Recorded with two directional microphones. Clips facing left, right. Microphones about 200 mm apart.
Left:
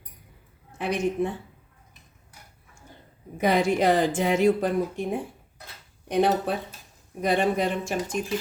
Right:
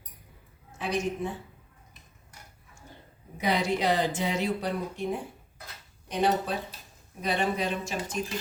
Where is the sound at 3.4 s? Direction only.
50° left (ahead or behind).